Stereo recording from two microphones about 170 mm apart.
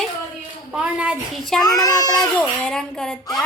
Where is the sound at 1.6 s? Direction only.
20° left (ahead or behind).